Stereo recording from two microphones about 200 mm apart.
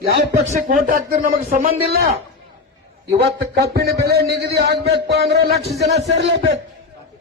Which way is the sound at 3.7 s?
55° right (ahead or behind).